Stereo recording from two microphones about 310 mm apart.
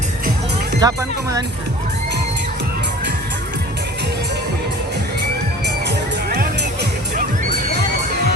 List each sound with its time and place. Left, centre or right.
0.8 s speech: centre